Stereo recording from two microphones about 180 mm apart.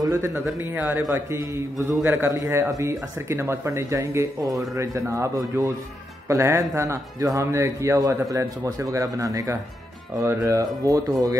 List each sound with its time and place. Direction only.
0.0 s a man's voice: 15° right (ahead or behind)